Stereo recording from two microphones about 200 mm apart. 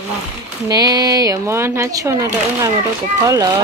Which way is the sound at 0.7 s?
20° right (ahead or behind).